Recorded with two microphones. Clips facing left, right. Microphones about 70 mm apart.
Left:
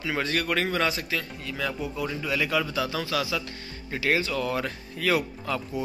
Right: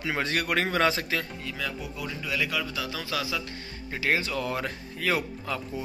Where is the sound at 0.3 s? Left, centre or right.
Right.